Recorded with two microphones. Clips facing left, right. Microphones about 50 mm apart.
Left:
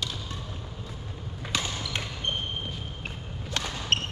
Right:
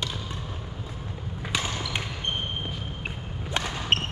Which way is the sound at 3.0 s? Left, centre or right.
Right.